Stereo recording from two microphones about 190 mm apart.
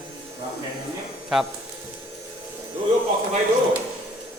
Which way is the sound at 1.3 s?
5° right (ahead or behind).